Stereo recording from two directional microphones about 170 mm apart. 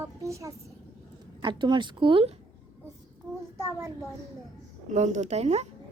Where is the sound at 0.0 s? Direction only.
20° right (ahead or behind).